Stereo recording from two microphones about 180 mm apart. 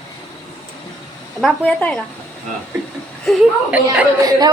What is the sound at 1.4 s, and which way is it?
Speech, 5° left (ahead or behind).